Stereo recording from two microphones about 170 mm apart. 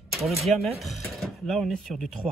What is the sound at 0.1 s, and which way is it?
Speech, centre (ahead or behind).